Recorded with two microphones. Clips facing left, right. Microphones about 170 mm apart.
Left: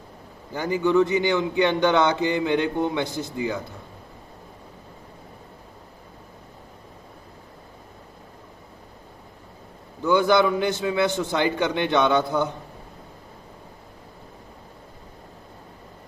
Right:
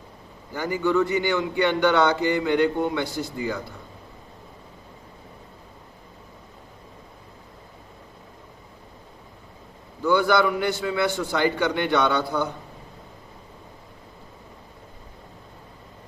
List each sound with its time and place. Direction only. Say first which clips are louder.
0.5 s a man's voice: left 2 dB; 20° left (ahead or behind)
10.1 s a man's voice: left 1 dB; 20° left (ahead or behind)